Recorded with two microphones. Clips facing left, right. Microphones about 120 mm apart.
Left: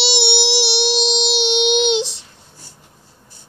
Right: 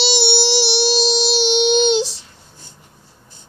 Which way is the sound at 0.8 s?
65° left (ahead or behind).